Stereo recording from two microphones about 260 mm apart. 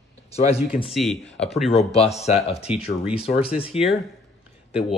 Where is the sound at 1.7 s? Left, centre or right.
Left.